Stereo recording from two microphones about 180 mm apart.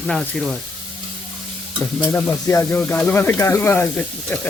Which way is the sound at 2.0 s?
10° left (ahead or behind).